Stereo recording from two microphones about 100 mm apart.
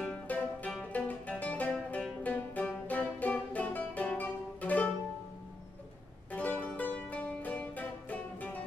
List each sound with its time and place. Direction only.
0.0 s music: 15° left (ahead or behind)
6.3 s music: 15° left (ahead or behind)